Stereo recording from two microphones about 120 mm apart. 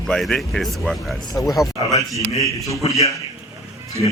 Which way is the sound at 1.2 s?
30° left (ahead or behind).